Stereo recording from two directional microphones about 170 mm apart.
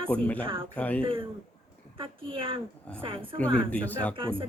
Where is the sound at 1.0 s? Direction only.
30° right (ahead or behind).